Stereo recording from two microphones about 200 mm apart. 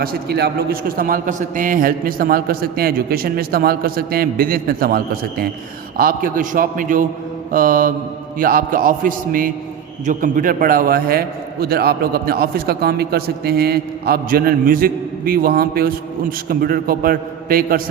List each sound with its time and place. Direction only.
0.0 s a man's voice: 50° right (ahead or behind)